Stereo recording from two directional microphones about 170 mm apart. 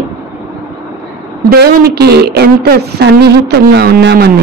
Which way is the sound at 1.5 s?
70° right (ahead or behind).